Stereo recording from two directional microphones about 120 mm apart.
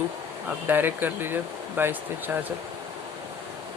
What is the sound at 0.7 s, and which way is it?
Speech, 15° right (ahead or behind).